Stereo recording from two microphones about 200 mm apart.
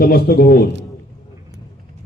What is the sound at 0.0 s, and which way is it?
Speech, 50° left (ahead or behind).